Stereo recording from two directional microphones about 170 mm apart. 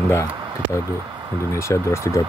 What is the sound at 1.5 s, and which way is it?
Speech, 15° left (ahead or behind).